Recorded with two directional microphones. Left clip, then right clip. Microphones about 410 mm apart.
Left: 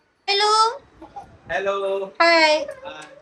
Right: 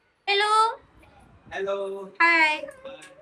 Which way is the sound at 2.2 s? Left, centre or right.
Centre.